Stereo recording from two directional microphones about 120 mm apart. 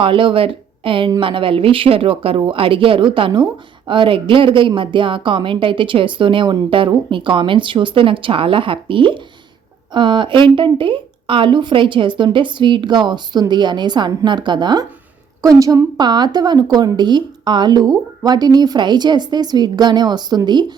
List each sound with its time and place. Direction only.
0.0 s a woman's voice: 45° right (ahead or behind)
15.4 s speech: 30° right (ahead or behind)